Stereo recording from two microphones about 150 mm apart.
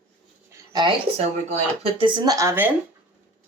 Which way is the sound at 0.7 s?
30° right (ahead or behind).